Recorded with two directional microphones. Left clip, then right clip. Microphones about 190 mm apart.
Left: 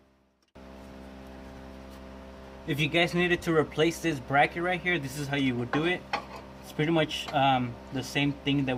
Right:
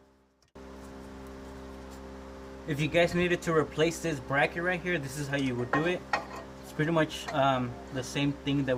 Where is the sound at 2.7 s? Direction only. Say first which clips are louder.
Even; 40° left (ahead or behind).